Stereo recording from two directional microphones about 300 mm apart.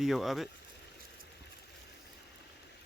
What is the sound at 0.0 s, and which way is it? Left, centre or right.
Speech, centre.